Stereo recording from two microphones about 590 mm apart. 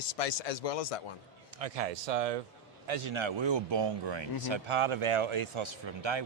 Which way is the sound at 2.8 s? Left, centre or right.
Right.